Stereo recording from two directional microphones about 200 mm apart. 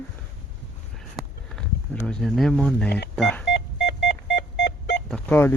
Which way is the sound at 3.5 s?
60° left (ahead or behind).